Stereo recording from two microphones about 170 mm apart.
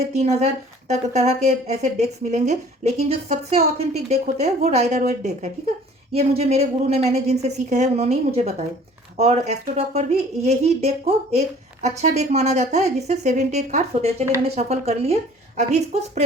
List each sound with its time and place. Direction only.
0.1 s speech: 40° right (ahead or behind)